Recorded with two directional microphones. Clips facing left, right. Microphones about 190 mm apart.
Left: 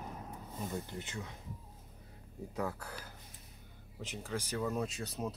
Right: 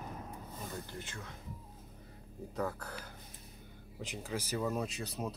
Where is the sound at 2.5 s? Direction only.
10° left (ahead or behind).